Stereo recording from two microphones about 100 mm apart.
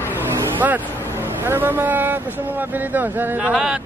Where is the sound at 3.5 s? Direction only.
5° right (ahead or behind).